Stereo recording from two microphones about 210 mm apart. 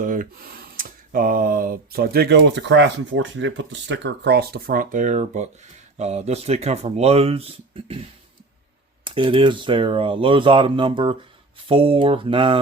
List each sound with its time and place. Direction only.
0.0 s speech: 40° right (ahead or behind)
9.0 s speech: 25° right (ahead or behind)